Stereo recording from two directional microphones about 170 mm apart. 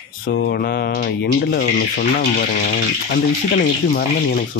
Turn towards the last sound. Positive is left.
turn(degrees=60)  # may be behind; listen again after turning